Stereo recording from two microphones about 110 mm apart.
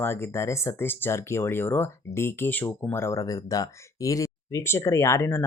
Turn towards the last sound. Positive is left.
turn(degrees=20)  # may be behind; listen again after turning